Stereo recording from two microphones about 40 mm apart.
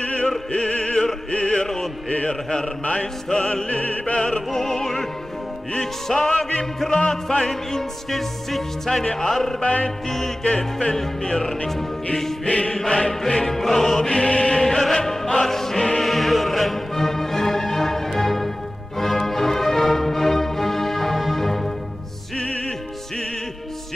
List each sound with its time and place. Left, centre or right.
0.0 s opera: left
1.3 s music: left
3.6 s opera: left
4.5 s music: centre
6.0 s music: centre
8.1 s music: centre
9.6 s music: left
9.8 s music: centre
12.4 s opera: left
12.7 s music: centre
14.6 s music: centre